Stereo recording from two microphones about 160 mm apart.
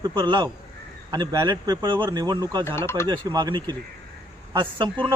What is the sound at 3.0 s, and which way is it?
A man's voice, 25° right (ahead or behind).